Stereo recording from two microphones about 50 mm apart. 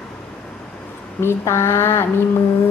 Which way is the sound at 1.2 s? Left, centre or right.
Left.